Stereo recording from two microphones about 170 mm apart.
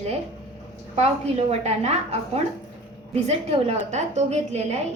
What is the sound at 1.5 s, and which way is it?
A woman's voice, 40° right (ahead or behind).